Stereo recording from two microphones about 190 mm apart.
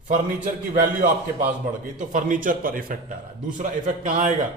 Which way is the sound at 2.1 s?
45° right (ahead or behind).